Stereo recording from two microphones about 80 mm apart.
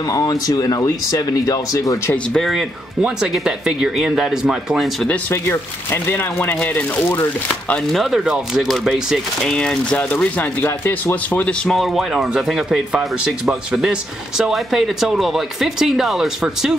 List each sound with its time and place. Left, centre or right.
0.1 s speech: left
2.3 s speech: centre
5.3 s speech: left
7.9 s speech: centre
9.4 s speech: centre
10.6 s speech: left
11.3 s speech: centre
11.7 s speech: centre